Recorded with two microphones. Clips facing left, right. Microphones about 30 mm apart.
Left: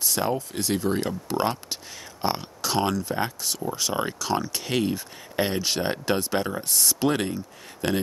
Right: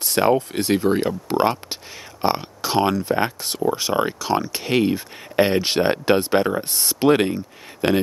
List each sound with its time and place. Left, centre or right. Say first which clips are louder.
0.0 s speech: right 8 dB; right